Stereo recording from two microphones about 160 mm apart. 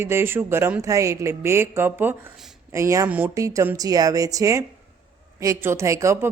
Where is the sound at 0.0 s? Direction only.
15° right (ahead or behind).